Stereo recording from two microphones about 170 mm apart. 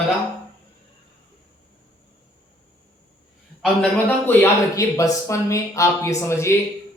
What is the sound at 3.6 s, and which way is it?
A man's voice, 10° left (ahead or behind).